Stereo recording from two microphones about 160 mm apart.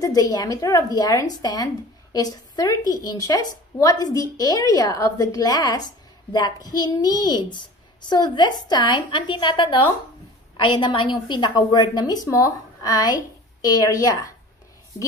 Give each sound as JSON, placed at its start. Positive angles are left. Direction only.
{"t": 0.0, "sound": "a woman's voice", "side_deg": 20}